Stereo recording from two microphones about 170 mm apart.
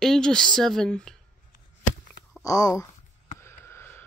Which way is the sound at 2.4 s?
20° left (ahead or behind).